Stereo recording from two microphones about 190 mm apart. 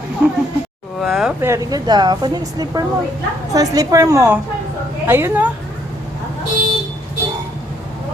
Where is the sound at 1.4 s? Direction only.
15° right (ahead or behind).